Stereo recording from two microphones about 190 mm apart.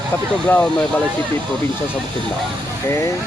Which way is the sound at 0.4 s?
5° left (ahead or behind).